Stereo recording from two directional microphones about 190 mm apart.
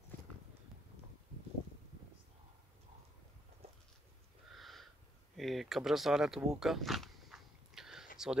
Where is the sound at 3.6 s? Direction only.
30° right (ahead or behind).